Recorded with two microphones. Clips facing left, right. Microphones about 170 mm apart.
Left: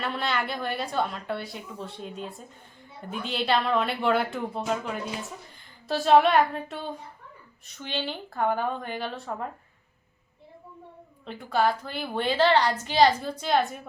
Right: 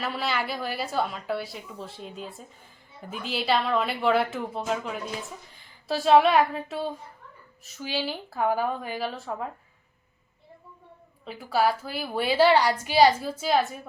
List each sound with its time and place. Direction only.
0.0 s a woman's voice: 5° right (ahead or behind)
11.3 s a woman's voice: 5° right (ahead or behind)